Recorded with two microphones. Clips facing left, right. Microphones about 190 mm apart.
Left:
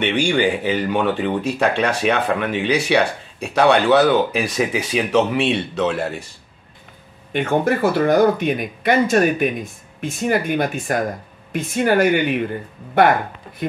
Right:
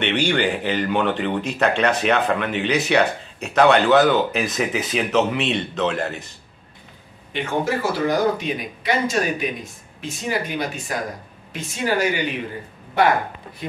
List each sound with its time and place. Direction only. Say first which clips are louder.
0.0 s speech: left 3 dB; 10° left (ahead or behind)
7.3 s speech: left 5 dB; 55° left (ahead or behind)